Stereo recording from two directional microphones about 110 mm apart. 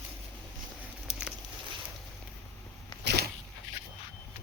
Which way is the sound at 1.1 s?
70° left (ahead or behind).